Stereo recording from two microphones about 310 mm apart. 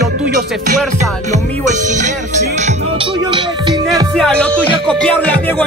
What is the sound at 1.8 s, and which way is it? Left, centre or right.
Music, right.